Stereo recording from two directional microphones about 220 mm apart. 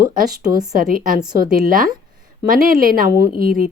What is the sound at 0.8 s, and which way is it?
Speech, 40° right (ahead or behind).